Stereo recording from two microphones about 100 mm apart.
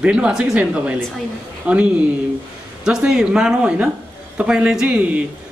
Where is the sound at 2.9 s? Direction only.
5° right (ahead or behind).